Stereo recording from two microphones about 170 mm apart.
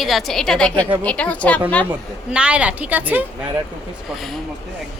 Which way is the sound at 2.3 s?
5° right (ahead or behind).